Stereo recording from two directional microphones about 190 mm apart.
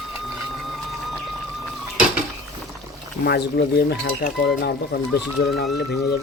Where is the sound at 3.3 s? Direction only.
60° left (ahead or behind).